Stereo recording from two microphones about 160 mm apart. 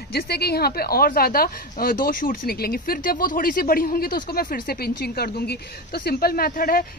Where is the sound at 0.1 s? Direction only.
80° left.